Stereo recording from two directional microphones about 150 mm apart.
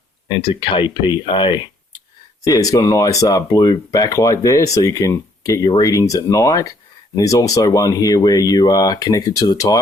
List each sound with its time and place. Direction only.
0.3 s speech: 35° left (ahead or behind)